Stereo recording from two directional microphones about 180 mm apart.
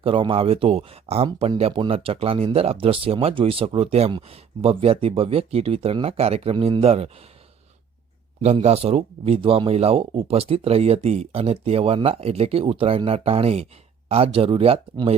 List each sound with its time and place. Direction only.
0.0 s speech: 30° right (ahead or behind)
8.4 s speech: 35° right (ahead or behind)